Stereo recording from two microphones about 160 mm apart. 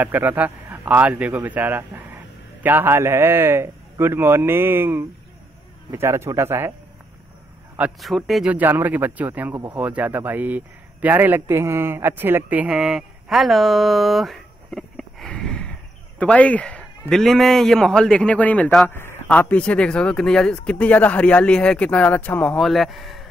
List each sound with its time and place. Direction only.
0.0 s speech: 10° right (ahead or behind)
7.7 s a man's voice: 5° right (ahead or behind)